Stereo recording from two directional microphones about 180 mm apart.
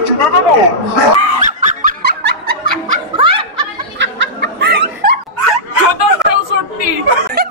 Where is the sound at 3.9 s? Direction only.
85° right; by 5.1 s 60° right (ahead or behind).